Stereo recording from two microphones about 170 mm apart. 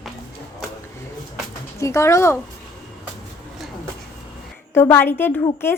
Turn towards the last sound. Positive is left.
turn(degrees=15)  # may be behind; listen again after turning